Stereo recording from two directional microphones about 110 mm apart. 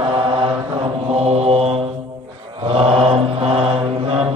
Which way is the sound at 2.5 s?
60° right (ahead or behind).